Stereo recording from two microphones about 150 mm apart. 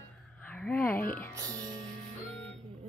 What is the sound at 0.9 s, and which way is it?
Music, 75° left (ahead or behind).